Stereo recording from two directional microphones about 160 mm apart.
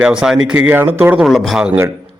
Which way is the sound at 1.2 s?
Centre (ahead or behind).